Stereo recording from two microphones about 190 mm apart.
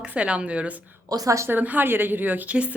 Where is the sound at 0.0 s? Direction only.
5° right (ahead or behind).